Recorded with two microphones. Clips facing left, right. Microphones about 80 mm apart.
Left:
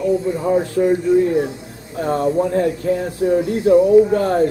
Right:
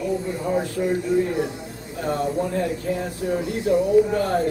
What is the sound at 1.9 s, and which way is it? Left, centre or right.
Speech, left.